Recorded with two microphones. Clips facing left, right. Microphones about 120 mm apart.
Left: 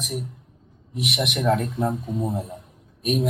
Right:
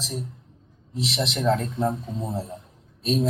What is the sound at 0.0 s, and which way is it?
Speech, 15° left (ahead or behind).